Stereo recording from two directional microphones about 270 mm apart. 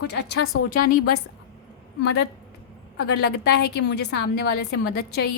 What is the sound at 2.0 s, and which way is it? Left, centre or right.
A woman's voice, left.